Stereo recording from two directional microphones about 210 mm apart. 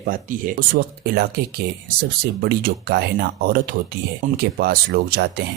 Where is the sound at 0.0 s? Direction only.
40° right (ahead or behind).